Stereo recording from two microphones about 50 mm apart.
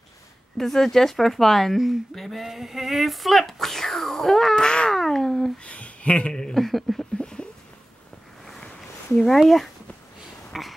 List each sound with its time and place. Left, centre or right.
0.6 s speech: centre
5.6 s speech: left
6.3 s speech: centre
6.6 s speech: centre
7.2 s a sound: centre
9.1 s speech: centre
10.5 s a sound: centre